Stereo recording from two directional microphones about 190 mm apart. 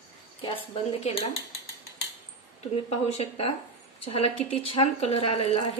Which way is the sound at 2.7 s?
35° left (ahead or behind).